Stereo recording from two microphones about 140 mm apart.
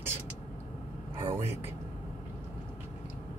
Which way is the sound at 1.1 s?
20° right (ahead or behind).